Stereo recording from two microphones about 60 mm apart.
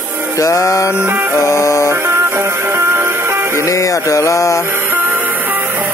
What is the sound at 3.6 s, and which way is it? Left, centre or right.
Music, left.